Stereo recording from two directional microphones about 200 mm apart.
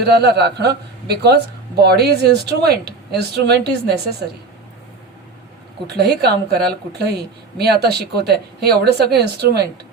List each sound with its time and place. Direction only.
0.0 s a man's voice: 55° right (ahead or behind)
5.9 s a man's voice: 55° right (ahead or behind)